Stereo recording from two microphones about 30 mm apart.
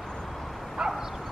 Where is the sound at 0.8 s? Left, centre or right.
Right.